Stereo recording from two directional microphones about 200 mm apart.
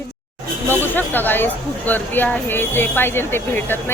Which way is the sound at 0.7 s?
10° left (ahead or behind).